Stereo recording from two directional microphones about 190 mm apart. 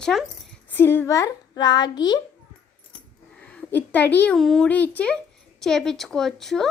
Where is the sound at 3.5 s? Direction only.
10° left (ahead or behind).